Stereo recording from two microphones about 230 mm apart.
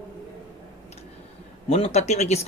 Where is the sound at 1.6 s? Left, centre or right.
Left.